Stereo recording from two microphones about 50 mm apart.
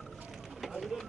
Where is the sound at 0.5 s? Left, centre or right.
Centre.